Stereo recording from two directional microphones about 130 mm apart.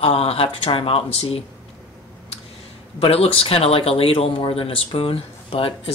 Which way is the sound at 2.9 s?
50° left (ahead or behind).